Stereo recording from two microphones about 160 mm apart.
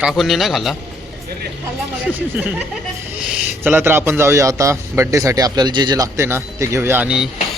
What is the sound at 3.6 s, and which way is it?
A man's voice, 10° right (ahead or behind).